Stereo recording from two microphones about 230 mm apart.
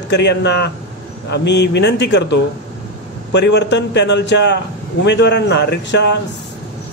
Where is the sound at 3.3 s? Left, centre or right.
Left.